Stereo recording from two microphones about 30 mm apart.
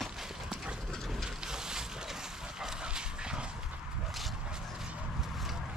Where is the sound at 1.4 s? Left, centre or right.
Right.